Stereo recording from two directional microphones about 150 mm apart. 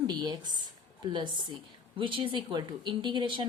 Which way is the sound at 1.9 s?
35° right (ahead or behind).